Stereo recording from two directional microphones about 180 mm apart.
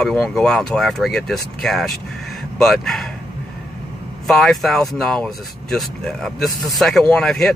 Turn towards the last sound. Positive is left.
turn(degrees=5)  # may be behind; listen again after turning